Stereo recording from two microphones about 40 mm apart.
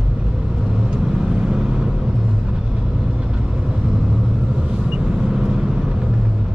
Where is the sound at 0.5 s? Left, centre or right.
Centre.